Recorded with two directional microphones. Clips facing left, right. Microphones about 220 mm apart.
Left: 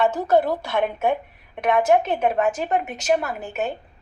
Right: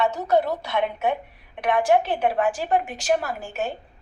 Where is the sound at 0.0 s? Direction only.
50° left (ahead or behind).